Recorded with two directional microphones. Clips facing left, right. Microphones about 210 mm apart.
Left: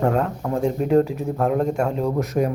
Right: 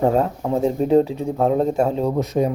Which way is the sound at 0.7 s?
30° right (ahead or behind).